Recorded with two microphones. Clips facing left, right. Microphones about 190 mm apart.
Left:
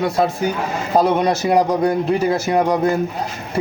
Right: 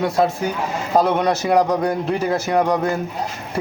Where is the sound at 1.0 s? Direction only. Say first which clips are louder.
Left 2 dB; 10° left (ahead or behind).